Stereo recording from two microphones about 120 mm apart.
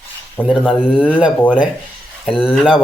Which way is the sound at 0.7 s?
5° right (ahead or behind).